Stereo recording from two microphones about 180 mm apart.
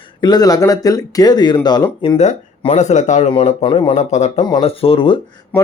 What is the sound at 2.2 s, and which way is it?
Speech, 40° left (ahead or behind).